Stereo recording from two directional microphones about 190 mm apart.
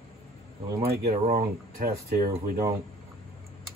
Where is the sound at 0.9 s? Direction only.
50° right (ahead or behind).